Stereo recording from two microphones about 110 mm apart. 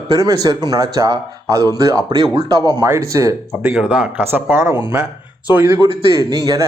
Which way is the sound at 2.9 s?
25° right (ahead or behind).